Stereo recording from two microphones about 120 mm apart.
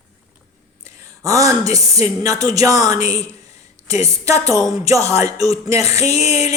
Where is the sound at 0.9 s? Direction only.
25° right (ahead or behind).